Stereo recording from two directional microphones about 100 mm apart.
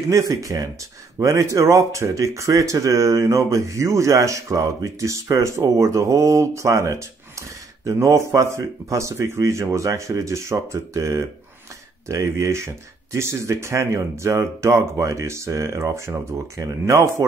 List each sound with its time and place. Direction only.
0.1 s speech: 35° right (ahead or behind)